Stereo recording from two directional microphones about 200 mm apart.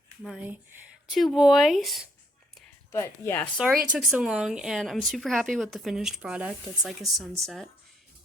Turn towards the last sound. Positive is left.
turn(degrees=0)  # may be behind; listen again after turning